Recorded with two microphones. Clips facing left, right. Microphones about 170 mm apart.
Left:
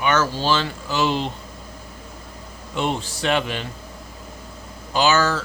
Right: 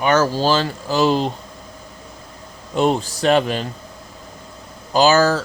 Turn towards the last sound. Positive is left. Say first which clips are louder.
# right 5 dB
turn(degrees=-40)  # may be behind; listen again after turning